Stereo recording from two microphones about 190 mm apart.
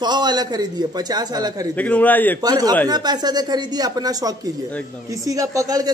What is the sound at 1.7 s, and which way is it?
Speech, 5° left (ahead or behind).